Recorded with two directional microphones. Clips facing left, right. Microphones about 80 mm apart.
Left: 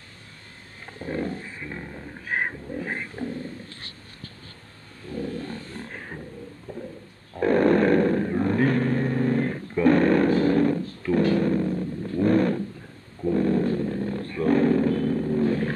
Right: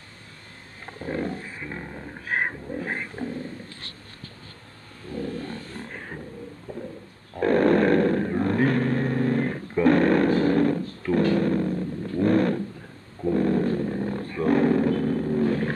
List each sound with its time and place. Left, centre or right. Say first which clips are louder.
1.1 s wild animals: even; centre
5.9 s roaring cats: even; centre
6.7 s a sound: right 1 dB; centre
7.3 s vehicle: even; centre
10.4 s dog: even; centre
13.3 s a sound: even; centre